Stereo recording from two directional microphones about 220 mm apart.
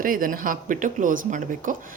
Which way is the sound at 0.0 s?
40° right (ahead or behind).